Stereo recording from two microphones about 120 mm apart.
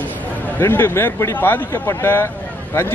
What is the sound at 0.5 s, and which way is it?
A man's voice, 20° left (ahead or behind).